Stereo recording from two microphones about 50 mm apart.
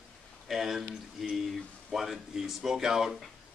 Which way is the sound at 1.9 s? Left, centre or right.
Centre.